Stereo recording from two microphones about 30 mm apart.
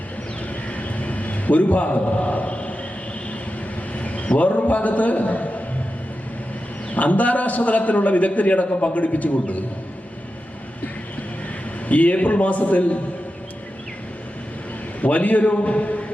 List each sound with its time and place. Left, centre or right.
0.7 s a sound: left
3.9 s a sound: left
4.4 s a man's voice: left
6.9 s a man's voice: left
11.9 s a man's voice: left
15.0 s a man's voice: left